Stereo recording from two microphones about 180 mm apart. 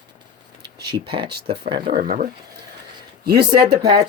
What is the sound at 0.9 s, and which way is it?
Speech, 30° right (ahead or behind).